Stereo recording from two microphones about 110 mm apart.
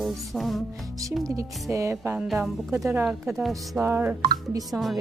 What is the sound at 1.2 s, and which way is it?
Speech, 30° right (ahead or behind).